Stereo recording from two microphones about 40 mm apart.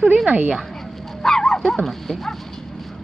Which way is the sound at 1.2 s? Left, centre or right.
Centre.